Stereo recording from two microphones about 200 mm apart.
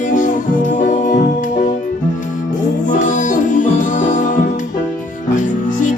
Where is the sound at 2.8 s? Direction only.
40° left (ahead or behind).